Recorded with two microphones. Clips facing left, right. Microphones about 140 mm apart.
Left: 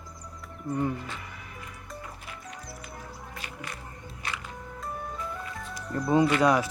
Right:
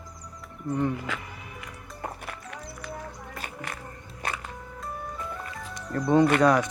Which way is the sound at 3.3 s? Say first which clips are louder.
Right 3 dB; 50° right (ahead or behind).